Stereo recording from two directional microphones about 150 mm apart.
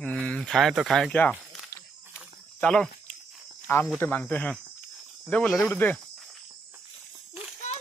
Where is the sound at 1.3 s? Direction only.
Centre (ahead or behind).